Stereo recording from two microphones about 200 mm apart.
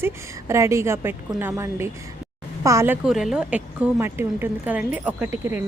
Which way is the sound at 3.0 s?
Centre (ahead or behind).